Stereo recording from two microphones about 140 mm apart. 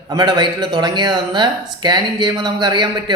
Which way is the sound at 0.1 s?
30° right (ahead or behind).